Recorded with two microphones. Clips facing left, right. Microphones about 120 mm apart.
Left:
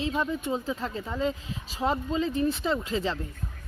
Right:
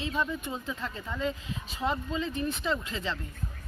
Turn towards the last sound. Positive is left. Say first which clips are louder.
# left 4 dB
turn(degrees=35)  # may be behind; listen again after turning